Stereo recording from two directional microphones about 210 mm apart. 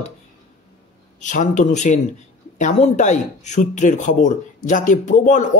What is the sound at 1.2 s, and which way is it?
Speech, 35° left (ahead or behind).